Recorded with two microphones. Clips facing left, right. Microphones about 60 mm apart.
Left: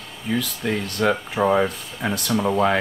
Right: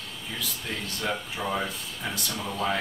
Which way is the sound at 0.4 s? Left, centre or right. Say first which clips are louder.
Left 7 dB; left.